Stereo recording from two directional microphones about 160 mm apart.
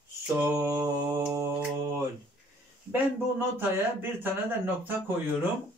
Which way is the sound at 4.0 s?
15° right (ahead or behind).